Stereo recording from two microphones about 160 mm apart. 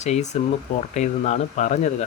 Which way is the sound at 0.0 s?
45° left (ahead or behind).